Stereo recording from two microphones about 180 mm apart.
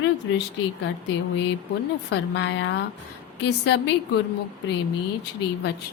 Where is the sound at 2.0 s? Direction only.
70° left (ahead or behind).